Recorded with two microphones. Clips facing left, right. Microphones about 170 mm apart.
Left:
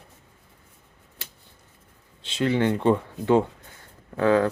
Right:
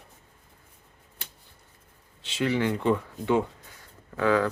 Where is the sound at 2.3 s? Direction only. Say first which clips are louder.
Left 3 dB; 25° left (ahead or behind).